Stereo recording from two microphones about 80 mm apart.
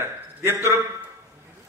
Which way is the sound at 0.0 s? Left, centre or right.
Right.